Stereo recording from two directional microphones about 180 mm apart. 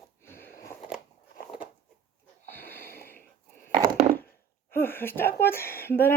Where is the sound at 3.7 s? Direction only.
30° right (ahead or behind).